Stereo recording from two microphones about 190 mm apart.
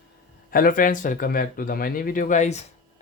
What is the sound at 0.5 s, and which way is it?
Speech, 50° left (ahead or behind).